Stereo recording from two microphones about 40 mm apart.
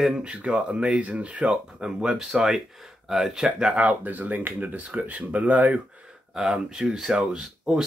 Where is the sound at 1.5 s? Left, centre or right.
Centre.